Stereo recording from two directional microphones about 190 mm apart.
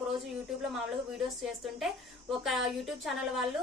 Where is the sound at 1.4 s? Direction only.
Centre (ahead or behind).